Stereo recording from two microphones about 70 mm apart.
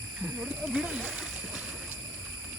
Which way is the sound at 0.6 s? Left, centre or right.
Centre.